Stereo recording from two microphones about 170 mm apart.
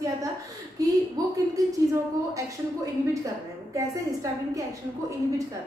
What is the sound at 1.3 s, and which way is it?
Speech, 20° right (ahead or behind).